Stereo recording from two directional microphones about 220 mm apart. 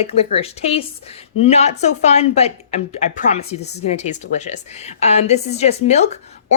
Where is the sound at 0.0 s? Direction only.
25° left (ahead or behind).